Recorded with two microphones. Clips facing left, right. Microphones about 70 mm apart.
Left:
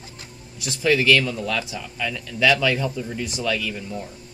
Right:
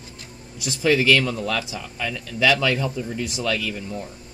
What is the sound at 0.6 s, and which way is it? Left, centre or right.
Speech, centre.